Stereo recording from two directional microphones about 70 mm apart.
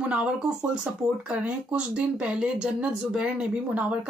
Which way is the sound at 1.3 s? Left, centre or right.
Centre.